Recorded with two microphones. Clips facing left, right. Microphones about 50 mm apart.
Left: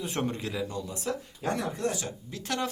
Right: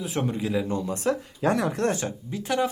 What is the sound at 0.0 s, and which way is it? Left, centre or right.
Speech, centre.